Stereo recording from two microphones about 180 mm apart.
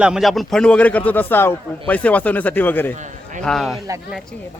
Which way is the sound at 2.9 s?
40° right (ahead or behind).